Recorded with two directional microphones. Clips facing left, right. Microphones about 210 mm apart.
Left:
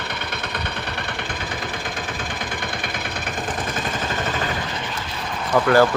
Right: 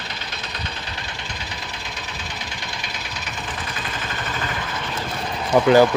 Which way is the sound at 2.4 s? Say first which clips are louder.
Left 6 dB; 55° left (ahead or behind).